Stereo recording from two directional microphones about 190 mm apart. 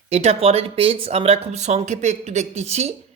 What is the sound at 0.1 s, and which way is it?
Speech, 35° right (ahead or behind).